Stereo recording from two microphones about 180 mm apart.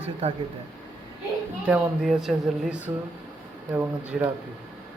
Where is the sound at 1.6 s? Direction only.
5° right (ahead or behind).